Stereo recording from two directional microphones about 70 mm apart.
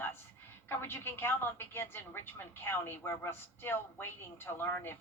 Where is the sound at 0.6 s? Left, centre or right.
Left.